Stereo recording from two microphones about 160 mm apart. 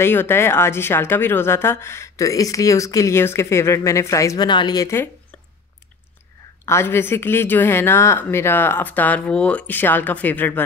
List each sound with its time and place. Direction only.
0.0 s speech: 15° left (ahead or behind)
6.6 s speech: 15° left (ahead or behind)